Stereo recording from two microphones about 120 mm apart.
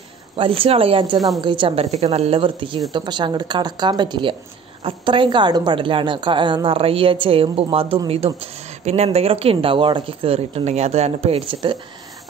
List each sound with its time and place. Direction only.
0.4 s speech: 50° right (ahead or behind)
1.1 s a woman's voice: centre (ahead or behind)
1.4 s speech: 45° right (ahead or behind)
8.4 s speech: 65° right (ahead or behind)